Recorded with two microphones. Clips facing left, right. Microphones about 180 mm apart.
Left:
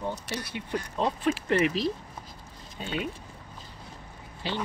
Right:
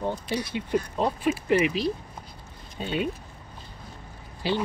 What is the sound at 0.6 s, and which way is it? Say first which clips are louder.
Speech: right 6 dB; 20° right (ahead or behind).